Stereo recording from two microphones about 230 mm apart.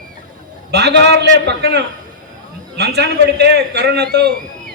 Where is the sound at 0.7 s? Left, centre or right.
Right.